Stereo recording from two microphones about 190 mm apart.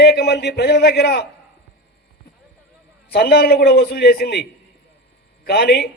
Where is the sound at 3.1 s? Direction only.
55° left (ahead or behind).